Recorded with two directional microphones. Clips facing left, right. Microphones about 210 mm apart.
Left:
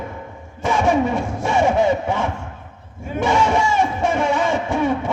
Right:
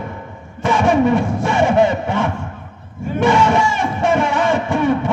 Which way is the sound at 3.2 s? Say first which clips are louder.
Right 3 dB; 55° right (ahead or behind).